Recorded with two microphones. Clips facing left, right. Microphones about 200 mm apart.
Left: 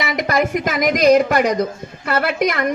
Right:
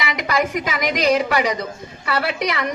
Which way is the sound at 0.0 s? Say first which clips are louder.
Left 3 dB; 50° left (ahead or behind).